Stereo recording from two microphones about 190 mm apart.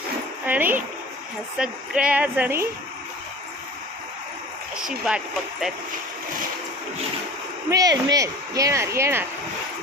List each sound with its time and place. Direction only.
0.4 s a sound: 10° right (ahead or behind)
1.5 s speech: 5° right (ahead or behind)
4.9 s speech: 5° right (ahead or behind)
7.7 s speech: 20° right (ahead or behind)